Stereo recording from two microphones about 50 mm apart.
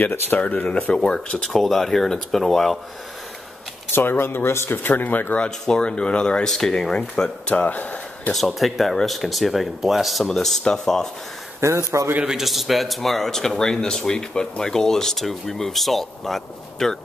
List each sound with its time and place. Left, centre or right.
0.0 s speech: left
0.4 s speech: left; by 2.8 s centre
3.9 s speech: left
4.8 s speech: left
5.4 s speech: centre
8.5 s speech: centre
11.6 s a man's voice: right
12.3 s speech: centre